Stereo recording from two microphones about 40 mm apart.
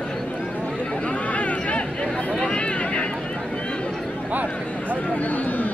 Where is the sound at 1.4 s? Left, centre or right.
Left.